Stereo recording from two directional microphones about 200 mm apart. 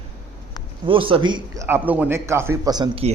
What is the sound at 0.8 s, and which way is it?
A man's voice, 25° right (ahead or behind).